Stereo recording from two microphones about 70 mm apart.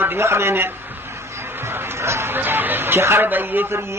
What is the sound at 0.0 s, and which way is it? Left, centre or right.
Speech, right.